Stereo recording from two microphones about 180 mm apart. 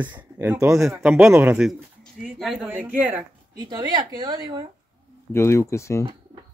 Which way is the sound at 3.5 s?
20° right (ahead or behind).